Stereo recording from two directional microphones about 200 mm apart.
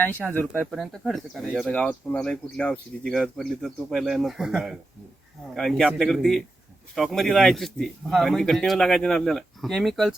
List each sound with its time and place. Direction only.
0.5 s speech: centre (ahead or behind)